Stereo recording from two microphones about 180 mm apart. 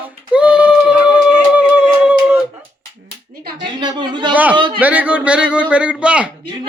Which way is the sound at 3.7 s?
25° right (ahead or behind).